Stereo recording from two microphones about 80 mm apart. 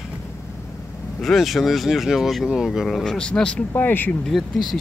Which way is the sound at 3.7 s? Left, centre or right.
Left.